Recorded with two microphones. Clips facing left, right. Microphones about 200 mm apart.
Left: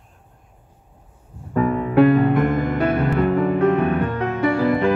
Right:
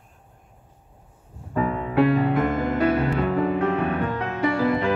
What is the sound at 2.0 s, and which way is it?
Music, 55° left (ahead or behind).